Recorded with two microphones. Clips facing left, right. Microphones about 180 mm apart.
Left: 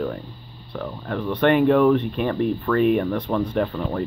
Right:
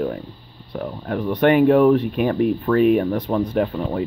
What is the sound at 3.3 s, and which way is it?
Speech, 15° right (ahead or behind).